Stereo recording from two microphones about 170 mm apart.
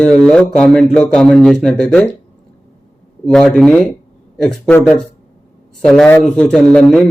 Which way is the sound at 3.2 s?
5° left (ahead or behind).